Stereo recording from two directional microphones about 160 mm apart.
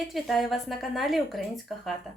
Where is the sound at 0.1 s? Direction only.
Centre (ahead or behind).